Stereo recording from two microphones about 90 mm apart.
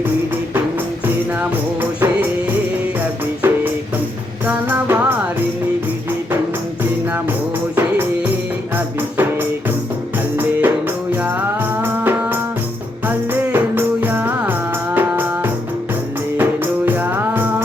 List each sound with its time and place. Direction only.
1.0 s music: 20° right (ahead or behind)
3.4 s music: 25° right (ahead or behind)
7.8 s music: 25° right (ahead or behind)